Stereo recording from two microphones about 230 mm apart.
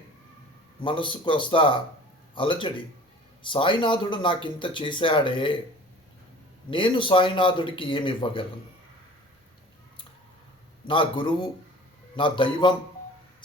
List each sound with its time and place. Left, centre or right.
0.8 s speech: left
6.7 s speech: left
10.8 s speech: left